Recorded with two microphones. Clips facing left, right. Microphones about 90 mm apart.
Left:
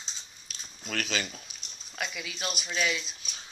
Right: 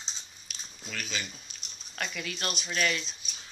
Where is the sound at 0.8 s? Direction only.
70° left (ahead or behind).